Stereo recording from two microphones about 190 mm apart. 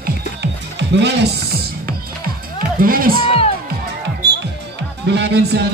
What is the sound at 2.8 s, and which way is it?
Music, 50° right (ahead or behind).